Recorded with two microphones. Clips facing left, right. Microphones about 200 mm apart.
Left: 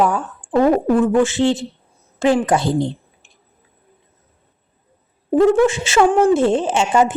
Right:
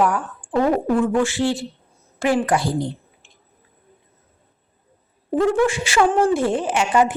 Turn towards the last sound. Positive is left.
turn(degrees=25)  # may be behind; listen again after turning